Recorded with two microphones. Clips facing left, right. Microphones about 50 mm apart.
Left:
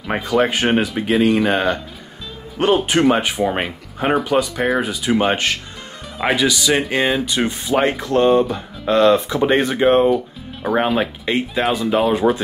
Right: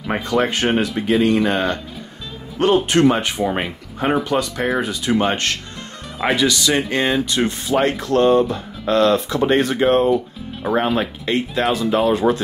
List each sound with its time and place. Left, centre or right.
0.0 s speech: centre
10.1 s speech: centre
11.2 s speech: centre